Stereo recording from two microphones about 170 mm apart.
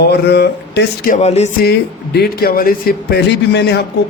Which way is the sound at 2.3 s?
60° left (ahead or behind).